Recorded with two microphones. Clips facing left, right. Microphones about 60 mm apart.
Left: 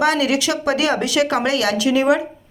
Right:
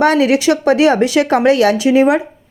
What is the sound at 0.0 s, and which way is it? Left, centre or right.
A woman's voice, right.